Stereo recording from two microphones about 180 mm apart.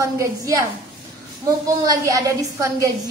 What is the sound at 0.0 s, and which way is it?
Speech, 15° right (ahead or behind).